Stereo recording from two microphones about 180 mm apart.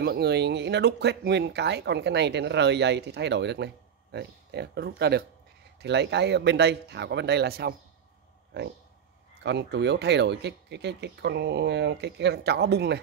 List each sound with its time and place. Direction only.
0.0 s speech: 65° right (ahead or behind)
9.4 s speech: 70° right (ahead or behind)